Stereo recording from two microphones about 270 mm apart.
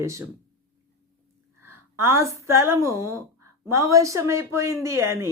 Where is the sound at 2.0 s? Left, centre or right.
Centre.